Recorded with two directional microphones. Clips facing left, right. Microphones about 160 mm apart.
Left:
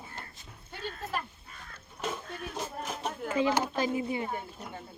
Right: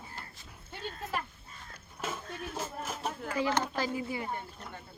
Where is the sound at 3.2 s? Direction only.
20° left (ahead or behind).